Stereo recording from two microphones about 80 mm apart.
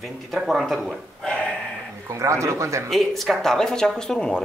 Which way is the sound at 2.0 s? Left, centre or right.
Right.